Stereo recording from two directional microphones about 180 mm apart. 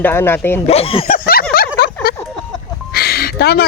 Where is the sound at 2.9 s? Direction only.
60° left (ahead or behind).